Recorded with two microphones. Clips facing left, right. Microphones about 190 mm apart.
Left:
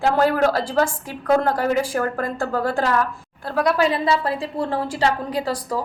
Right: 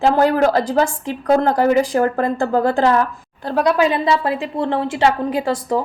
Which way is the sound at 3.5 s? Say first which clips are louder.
Right 3 dB; 20° right (ahead or behind).